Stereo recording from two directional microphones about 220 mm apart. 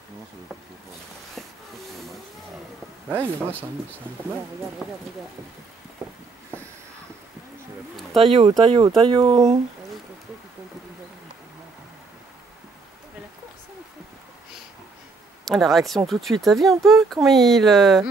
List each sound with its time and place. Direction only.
3.1 s speech: 10° right (ahead or behind)
4.8 s speech: centre (ahead or behind)
8.2 s speech: 25° right (ahead or behind)
15.4 s speech: centre (ahead or behind)